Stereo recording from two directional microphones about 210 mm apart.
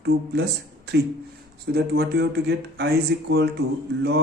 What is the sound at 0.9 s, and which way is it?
A man's voice, 50° right (ahead or behind).